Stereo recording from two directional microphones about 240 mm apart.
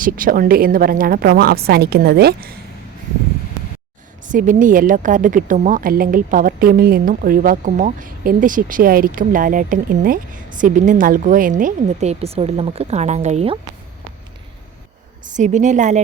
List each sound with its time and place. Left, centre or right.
0.0 s a woman's voice: right
4.3 s a woman's voice: right
15.4 s a woman's voice: right